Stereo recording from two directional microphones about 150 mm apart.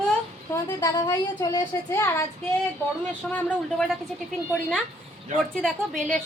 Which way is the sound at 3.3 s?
5° left (ahead or behind).